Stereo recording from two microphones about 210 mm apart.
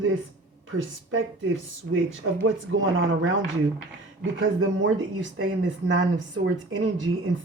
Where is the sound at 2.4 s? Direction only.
70° right (ahead or behind).